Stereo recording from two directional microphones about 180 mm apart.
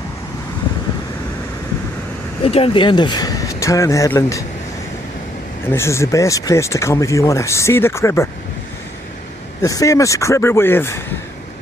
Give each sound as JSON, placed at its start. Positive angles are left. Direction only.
{"t": 2.4, "sound": "speech", "side_deg": 30}
{"t": 5.7, "sound": "speech", "side_deg": 15}
{"t": 9.6, "sound": "speech", "side_deg": 20}